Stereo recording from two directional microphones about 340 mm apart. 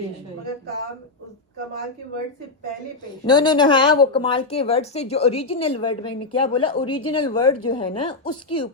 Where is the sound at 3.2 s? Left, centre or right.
Centre.